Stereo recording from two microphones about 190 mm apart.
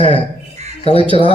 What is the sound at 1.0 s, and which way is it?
Speech, 25° right (ahead or behind).